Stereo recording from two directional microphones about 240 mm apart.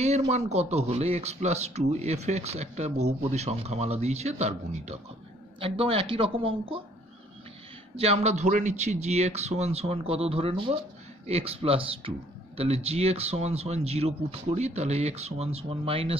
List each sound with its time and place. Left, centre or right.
0.3 s speech: right
7.9 s speech: right